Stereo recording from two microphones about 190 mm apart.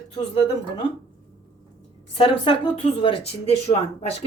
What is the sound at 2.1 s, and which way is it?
Speech, 30° left (ahead or behind).